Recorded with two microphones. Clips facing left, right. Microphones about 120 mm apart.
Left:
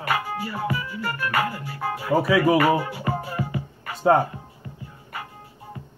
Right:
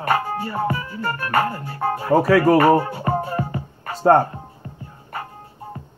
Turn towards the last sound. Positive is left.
turn(degrees=-35)  # may be behind; listen again after turning